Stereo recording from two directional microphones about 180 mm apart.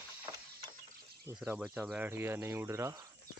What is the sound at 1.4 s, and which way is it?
Speech, 5° right (ahead or behind).